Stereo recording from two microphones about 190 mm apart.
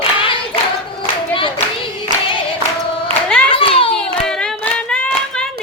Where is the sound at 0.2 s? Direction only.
25° left (ahead or behind).